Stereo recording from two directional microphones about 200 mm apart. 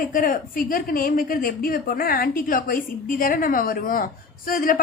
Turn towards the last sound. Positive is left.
turn(degrees=45)  # may be behind; listen again after turning